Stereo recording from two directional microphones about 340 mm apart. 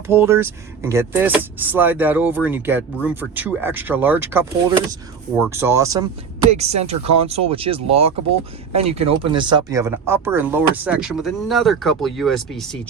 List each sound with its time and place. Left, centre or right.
0.1 s speech: centre